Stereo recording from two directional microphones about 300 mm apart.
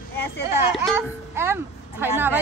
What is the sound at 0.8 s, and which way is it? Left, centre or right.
A child's voice, centre.